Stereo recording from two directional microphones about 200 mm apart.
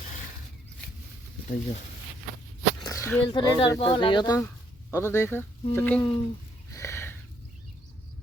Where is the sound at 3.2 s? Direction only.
25° left (ahead or behind); by 6.0 s 5° left (ahead or behind).